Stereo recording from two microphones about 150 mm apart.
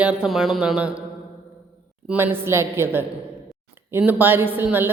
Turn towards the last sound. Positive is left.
turn(degrees=-15)  # may be behind; listen again after turning